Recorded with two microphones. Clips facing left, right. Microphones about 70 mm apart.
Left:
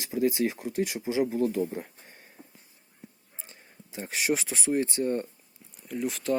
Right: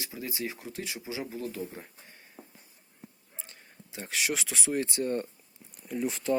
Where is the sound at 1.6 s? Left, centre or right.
Left.